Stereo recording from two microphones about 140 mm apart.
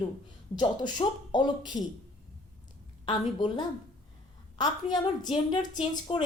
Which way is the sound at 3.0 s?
30° left (ahead or behind).